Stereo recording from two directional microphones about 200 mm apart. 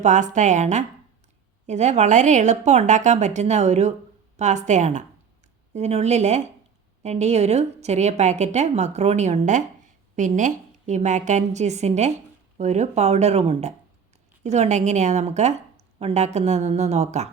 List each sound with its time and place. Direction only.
0.0 s a woman's voice: 35° right (ahead or behind)